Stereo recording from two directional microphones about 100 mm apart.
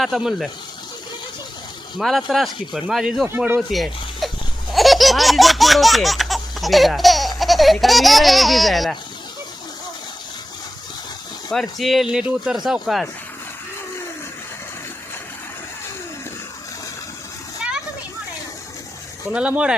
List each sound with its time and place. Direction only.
0.0 s speech: 5° right (ahead or behind)
2.0 s speech: centre (ahead or behind)
3.2 s a man's voice: 20° right (ahead or behind)
3.7 s a sound: centre (ahead or behind)
4.7 s baby laughter: centre (ahead or behind)
11.5 s speech: centre (ahead or behind)
19.3 s speech: 10° right (ahead or behind)